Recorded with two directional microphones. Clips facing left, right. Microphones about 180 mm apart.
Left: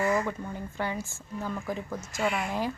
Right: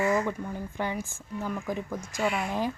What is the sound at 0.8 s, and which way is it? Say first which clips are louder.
Speech: even; 15° right (ahead or behind).